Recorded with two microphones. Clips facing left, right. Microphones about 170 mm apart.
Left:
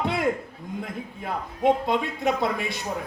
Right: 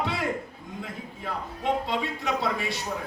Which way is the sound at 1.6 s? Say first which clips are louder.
Left 6 dB; 55° left (ahead or behind).